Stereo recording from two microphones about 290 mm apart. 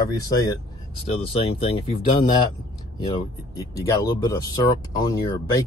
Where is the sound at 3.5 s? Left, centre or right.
Centre.